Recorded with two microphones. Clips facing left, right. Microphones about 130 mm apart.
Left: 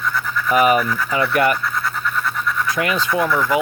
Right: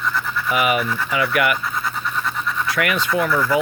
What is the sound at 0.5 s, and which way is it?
Speech, 35° left (ahead or behind).